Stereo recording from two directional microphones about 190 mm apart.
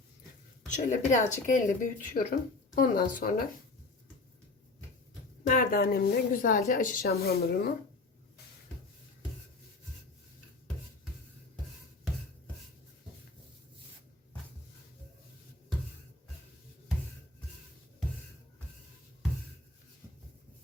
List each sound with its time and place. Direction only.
0.7 s a woman's voice: 40° left (ahead or behind)
5.5 s a woman's voice: 50° left (ahead or behind)